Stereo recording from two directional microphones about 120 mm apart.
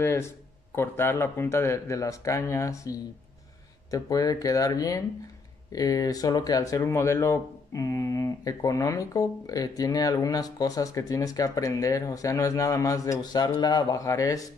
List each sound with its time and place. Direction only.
0.0 s speech: 20° left (ahead or behind)